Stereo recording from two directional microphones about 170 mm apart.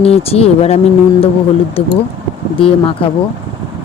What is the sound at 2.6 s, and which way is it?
Speech, 35° left (ahead or behind).